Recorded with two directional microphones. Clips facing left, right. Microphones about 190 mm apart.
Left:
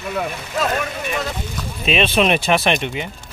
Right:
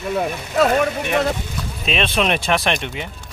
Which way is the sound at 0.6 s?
60° right (ahead or behind).